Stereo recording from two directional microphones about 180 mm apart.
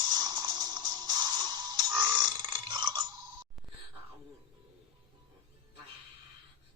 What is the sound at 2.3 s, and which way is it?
Burping, 25° right (ahead or behind).